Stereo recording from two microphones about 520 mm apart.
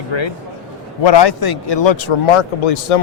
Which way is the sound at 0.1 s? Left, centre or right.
Left.